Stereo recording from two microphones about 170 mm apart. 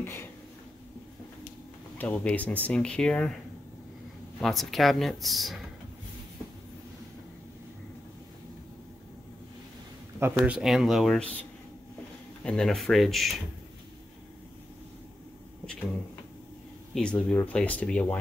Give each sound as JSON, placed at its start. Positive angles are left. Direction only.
{"t": 0.0, "sound": "a sound", "side_deg": 15}
{"t": 2.0, "sound": "speech", "side_deg": 10}
{"t": 4.4, "sound": "speech", "side_deg": 0}
{"t": 10.2, "sound": "speech", "side_deg": -10}
{"t": 12.4, "sound": "speech", "side_deg": 0}
{"t": 16.9, "sound": "speech", "side_deg": 5}